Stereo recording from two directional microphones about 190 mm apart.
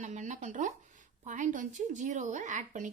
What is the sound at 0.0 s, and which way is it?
A woman's voice, 40° right (ahead or behind).